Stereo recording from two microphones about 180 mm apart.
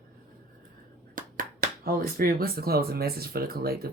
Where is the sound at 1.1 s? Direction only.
50° right (ahead or behind).